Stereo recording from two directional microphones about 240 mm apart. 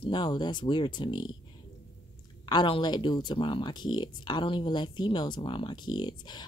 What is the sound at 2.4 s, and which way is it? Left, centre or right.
Speech, centre.